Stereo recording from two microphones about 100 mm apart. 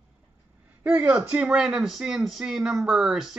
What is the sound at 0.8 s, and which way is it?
Speech, 15° right (ahead or behind).